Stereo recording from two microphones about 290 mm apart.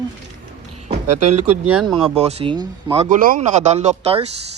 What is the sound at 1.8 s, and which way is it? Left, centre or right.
Speech, centre.